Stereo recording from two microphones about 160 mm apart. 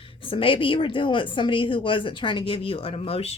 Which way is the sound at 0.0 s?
35° left (ahead or behind).